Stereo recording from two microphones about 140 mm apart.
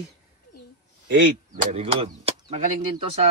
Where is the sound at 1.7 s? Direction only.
45° right (ahead or behind).